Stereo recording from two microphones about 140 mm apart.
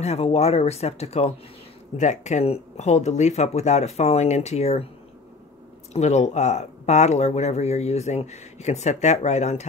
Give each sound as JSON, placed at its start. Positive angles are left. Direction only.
{"t": 0.0, "sound": "speech", "side_deg": 50}
{"t": 5.9, "sound": "speech", "side_deg": 50}